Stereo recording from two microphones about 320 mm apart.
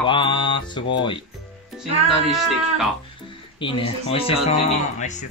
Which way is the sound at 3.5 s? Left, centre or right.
Centre.